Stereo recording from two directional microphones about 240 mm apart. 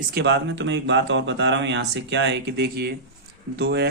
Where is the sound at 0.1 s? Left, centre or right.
Right.